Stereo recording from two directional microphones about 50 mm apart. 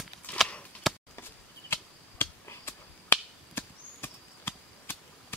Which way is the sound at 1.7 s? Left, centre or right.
Left.